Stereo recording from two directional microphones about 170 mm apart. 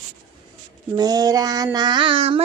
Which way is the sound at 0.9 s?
20° right (ahead or behind).